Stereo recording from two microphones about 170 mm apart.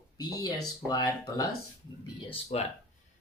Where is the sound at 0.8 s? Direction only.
25° left (ahead or behind).